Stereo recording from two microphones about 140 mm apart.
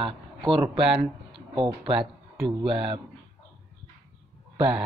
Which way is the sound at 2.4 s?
35° right (ahead or behind).